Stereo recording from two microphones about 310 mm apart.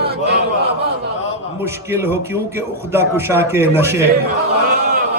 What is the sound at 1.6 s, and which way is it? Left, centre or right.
A man's voice, centre.